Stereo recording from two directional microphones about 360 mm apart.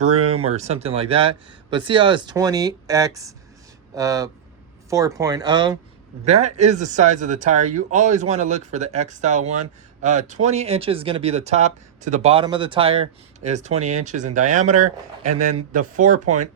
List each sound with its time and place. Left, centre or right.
0.0 s speech: centre
16.2 s speech: right